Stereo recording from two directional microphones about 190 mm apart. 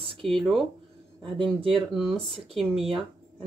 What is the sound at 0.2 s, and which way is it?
Speech, centre (ahead or behind).